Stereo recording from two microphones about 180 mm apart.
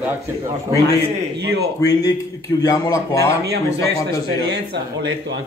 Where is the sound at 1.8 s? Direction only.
20° left (ahead or behind).